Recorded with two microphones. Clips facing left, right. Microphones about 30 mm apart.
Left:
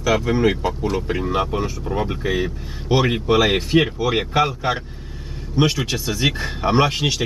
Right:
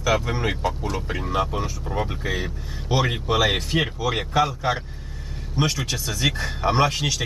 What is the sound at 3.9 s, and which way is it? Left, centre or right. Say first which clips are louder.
Speech: left 3 dB; left.